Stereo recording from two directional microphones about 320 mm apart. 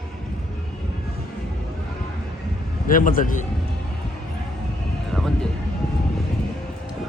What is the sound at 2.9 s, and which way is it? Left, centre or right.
Speech, left.